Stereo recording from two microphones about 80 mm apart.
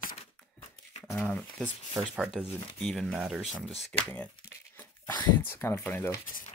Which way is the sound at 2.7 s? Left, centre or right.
Centre.